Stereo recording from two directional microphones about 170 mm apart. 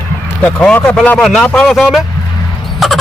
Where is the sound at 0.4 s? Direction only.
10° left (ahead or behind).